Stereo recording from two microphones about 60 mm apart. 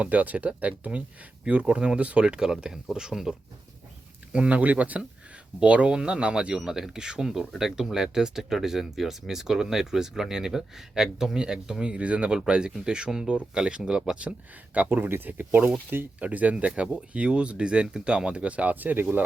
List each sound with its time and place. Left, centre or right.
0.0 s speech: right